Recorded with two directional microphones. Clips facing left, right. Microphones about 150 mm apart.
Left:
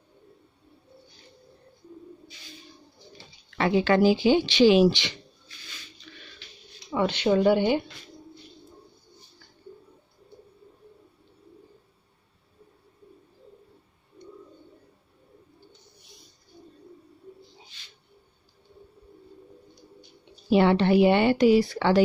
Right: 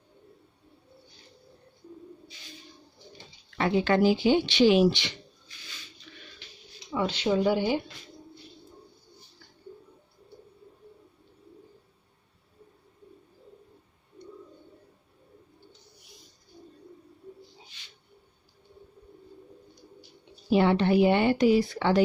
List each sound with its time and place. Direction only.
3.5 s speech: 90° left
6.9 s speech: 60° left (ahead or behind)
20.4 s a woman's voice: 70° left (ahead or behind)